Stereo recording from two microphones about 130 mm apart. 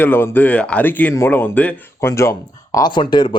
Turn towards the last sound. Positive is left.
turn(degrees=40)  # may be behind; listen again after turning